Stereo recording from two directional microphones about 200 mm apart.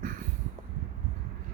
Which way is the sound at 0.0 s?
45° right (ahead or behind).